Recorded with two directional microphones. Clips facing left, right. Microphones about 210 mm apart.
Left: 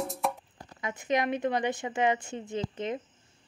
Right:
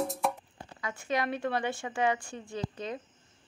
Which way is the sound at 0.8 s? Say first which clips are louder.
Left 3 dB; 20° left (ahead or behind).